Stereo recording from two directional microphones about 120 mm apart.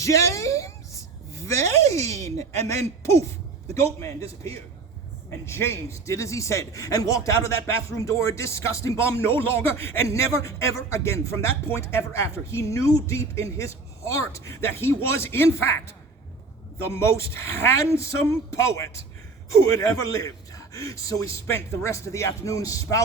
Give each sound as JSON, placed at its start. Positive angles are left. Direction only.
{"t": 0.0, "sound": "a sound", "side_deg": 25}
{"t": 1.3, "sound": "a man's voice", "side_deg": 25}
{"t": 5.5, "sound": "a man's voice", "side_deg": 20}